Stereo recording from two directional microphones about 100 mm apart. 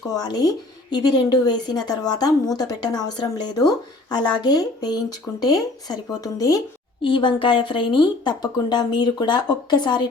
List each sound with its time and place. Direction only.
0.2 s a woman's voice: 40° left (ahead or behind)
7.0 s speech: 55° left (ahead or behind)